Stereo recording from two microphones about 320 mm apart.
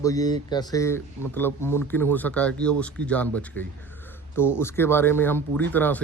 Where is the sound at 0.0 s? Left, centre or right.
Centre.